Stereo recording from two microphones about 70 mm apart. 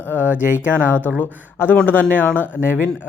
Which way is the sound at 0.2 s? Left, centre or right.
Right.